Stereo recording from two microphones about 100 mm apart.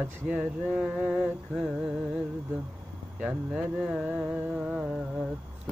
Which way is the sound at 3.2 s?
10° right (ahead or behind).